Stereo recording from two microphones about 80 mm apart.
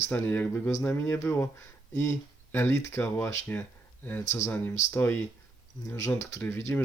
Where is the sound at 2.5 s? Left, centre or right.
Left.